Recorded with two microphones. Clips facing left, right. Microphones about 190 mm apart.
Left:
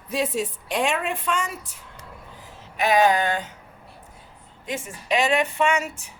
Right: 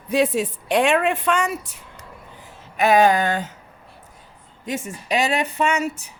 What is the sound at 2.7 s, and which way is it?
Speech, 50° right (ahead or behind).